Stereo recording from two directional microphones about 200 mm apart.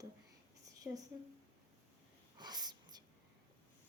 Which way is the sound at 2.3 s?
20° right (ahead or behind).